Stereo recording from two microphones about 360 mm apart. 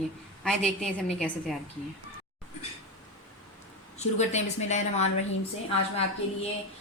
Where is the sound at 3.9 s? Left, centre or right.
Centre.